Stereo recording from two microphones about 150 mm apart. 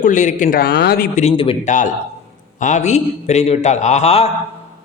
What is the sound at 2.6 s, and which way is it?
A man's voice, 55° left (ahead or behind).